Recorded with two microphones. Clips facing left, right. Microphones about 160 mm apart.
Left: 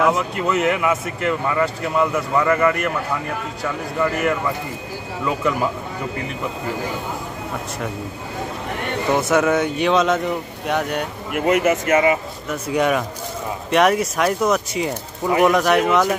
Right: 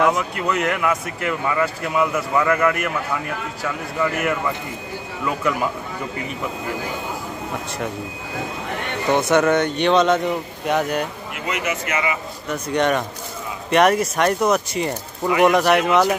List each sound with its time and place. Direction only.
0.0 s speech: centre (ahead or behind)
9.1 s speech: 5° left (ahead or behind)
11.3 s speech: 50° left (ahead or behind)
12.4 s speech: 5° left (ahead or behind)